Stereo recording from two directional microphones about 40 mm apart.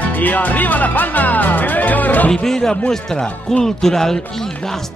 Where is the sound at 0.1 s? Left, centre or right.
Left.